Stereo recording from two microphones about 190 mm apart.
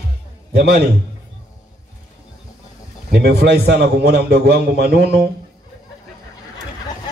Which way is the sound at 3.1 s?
55° right (ahead or behind).